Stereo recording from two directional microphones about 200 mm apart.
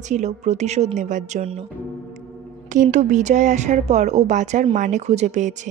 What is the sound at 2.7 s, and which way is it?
A woman's voice, 40° right (ahead or behind).